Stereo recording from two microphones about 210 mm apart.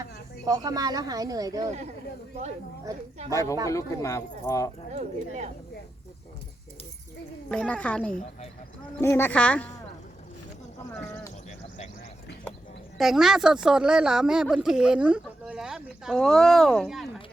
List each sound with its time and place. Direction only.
0.0 s speech: 15° right (ahead or behind)
3.2 s speech: 15° left (ahead or behind)
4.9 s speech: 35° right (ahead or behind)
7.5 s a woman's voice: 5° left (ahead or behind)
13.0 s a woman's voice: centre (ahead or behind)